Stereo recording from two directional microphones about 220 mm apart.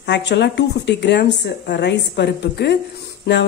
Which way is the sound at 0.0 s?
50° left (ahead or behind).